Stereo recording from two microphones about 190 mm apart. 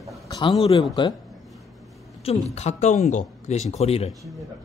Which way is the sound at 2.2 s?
35° left (ahead or behind).